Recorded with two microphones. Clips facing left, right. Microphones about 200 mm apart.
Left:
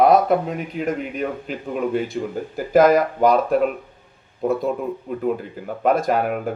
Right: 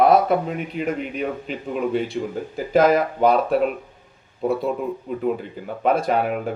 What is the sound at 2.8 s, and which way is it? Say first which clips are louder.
Speech: left 2 dB; 50° left (ahead or behind).